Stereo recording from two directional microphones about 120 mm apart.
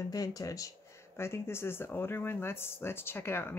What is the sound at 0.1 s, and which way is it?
Speech, 30° left (ahead or behind).